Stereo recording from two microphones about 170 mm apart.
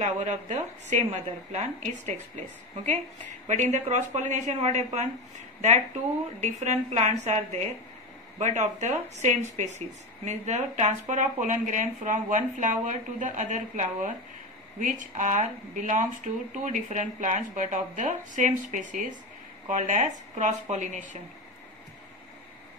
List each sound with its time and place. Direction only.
0.0 s speech: 45° right (ahead or behind)
6.4 s a woman's voice: 45° right (ahead or behind)